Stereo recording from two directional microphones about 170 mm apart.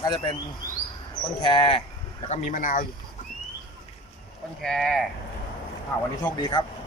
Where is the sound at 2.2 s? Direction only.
40° left (ahead or behind).